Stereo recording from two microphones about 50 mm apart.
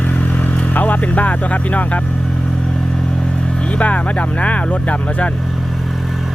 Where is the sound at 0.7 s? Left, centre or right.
Left.